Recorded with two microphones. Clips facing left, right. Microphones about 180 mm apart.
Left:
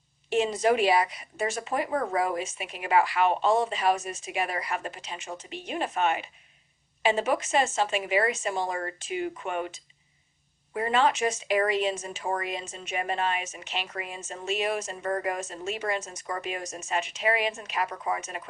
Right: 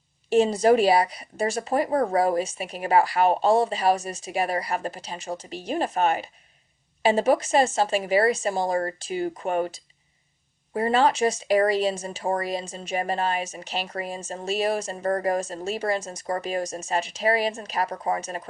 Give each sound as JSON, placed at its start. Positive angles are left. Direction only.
{"t": 0.3, "sound": "speech", "side_deg": -35}